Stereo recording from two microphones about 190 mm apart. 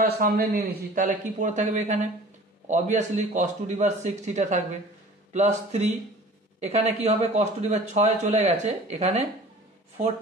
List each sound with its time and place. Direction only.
0.0 s a man's voice: 50° right (ahead or behind); by 9.2 s 35° right (ahead or behind)